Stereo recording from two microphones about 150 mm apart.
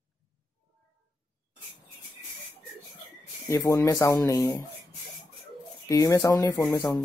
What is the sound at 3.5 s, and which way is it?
Speech, 20° left (ahead or behind).